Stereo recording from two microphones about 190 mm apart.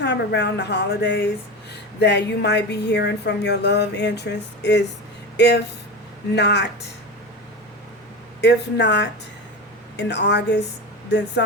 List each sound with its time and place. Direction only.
0.0 s speech: 65° left (ahead or behind)
8.4 s speech: 65° left (ahead or behind)